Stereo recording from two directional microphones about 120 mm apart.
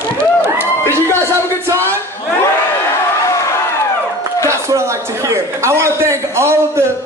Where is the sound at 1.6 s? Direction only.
20° right (ahead or behind).